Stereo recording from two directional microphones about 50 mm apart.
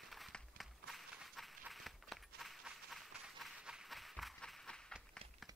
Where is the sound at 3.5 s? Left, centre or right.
Centre.